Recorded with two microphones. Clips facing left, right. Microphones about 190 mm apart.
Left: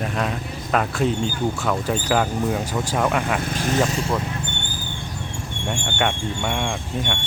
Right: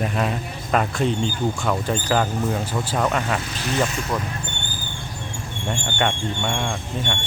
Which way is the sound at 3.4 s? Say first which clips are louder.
Left 4 dB; 50° left (ahead or behind).